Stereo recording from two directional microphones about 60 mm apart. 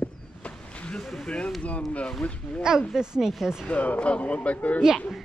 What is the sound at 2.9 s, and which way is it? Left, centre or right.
Speech, centre.